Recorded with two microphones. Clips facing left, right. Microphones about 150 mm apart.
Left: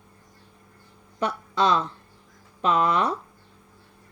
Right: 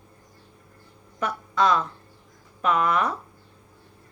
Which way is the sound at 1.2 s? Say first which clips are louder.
Even; 30° left (ahead or behind).